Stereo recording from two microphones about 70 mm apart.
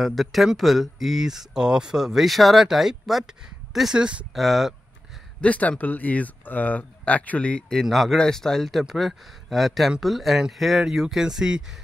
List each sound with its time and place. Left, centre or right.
0.0 s speech: centre
4.3 s speech: centre
5.4 s speech: centre
7.8 s speech: centre